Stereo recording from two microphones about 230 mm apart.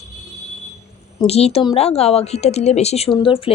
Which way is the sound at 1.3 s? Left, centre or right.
Left.